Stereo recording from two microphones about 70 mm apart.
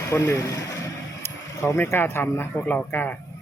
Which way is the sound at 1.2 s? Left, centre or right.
Left.